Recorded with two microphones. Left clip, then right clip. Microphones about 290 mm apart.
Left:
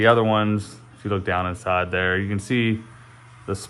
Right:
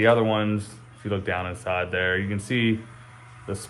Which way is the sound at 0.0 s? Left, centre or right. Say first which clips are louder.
Left 3 dB; left.